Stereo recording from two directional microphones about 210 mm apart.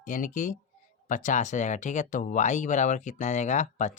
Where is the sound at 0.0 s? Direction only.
40° left (ahead or behind).